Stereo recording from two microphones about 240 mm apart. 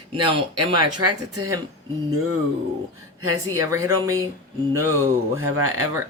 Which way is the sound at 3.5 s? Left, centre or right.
Centre.